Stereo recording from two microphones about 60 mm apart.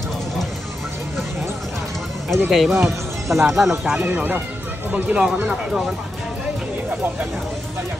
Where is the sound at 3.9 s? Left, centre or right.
Right.